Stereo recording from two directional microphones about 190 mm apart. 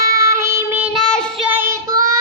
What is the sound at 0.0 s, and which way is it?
Child singing, 15° right (ahead or behind).